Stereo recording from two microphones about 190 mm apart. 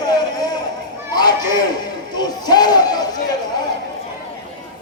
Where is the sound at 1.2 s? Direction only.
20° left (ahead or behind).